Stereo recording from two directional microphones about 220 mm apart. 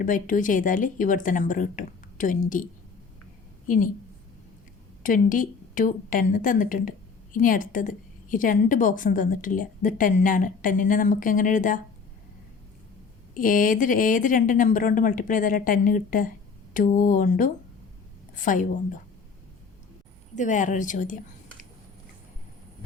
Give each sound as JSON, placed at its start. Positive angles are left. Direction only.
{"t": 0.0, "sound": "a woman's voice", "side_deg": 35}
{"t": 5.0, "sound": "a woman's voice", "side_deg": 35}
{"t": 13.3, "sound": "a woman's voice", "side_deg": 40}
{"t": 20.3, "sound": "a woman's voice", "side_deg": 35}